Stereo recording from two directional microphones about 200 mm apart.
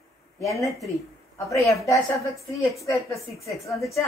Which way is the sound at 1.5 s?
15° left (ahead or behind).